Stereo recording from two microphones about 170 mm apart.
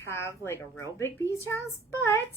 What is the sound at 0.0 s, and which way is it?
A woman's voice, 15° left (ahead or behind).